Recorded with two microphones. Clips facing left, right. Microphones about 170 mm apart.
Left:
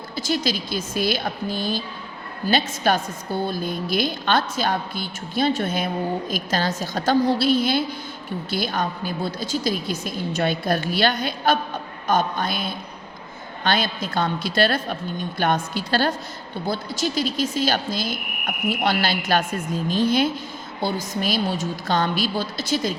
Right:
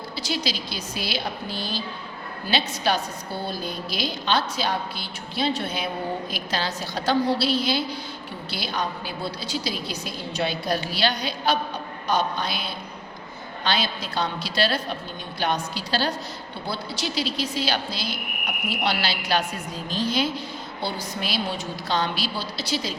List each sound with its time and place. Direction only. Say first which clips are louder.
0.2 s a woman's voice: left 5 dB; 50° left (ahead or behind)